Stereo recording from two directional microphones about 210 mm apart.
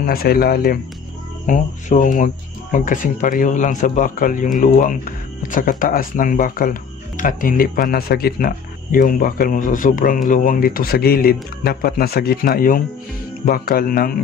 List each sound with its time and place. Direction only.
0.0 s speech: 45° left (ahead or behind)